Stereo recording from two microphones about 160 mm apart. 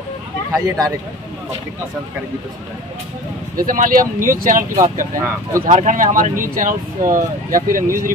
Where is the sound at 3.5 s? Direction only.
60° right (ahead or behind).